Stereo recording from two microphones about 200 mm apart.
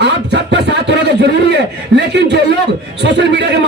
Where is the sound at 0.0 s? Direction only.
60° right (ahead or behind).